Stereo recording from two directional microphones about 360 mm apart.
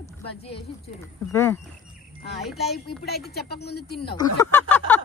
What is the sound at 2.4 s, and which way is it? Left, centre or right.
Speech, centre.